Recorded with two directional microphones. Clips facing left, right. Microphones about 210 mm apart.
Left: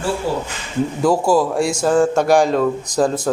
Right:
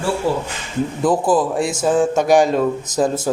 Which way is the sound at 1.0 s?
Centre (ahead or behind).